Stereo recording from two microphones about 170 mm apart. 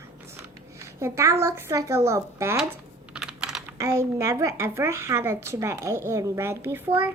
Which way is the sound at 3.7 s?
15° right (ahead or behind).